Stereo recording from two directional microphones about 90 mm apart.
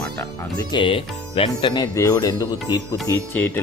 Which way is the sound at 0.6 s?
60° left (ahead or behind).